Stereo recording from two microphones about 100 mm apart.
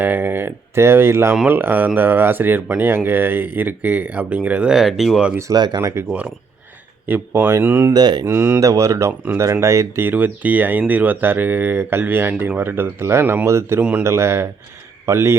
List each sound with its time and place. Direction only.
0.0 s speech: 20° right (ahead or behind); by 5.3 s centre (ahead or behind)
5.4 s speech: 40° right (ahead or behind)
5.8 s speech: 25° right (ahead or behind)
6.1 s speech: 10° right (ahead or behind)
7.1 s speech: 20° right (ahead or behind)
7.9 s speech: 45° right (ahead or behind)
8.2 s speech: 25° right (ahead or behind)